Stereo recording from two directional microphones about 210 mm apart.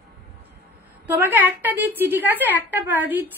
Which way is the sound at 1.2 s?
10° right (ahead or behind).